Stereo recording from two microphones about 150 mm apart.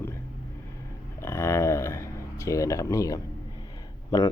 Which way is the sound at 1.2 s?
15° left (ahead or behind).